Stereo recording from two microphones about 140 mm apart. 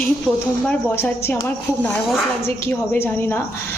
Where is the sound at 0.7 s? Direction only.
10° left (ahead or behind).